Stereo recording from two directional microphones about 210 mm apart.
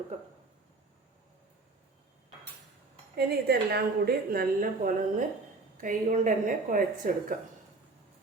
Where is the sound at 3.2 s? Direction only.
50° right (ahead or behind).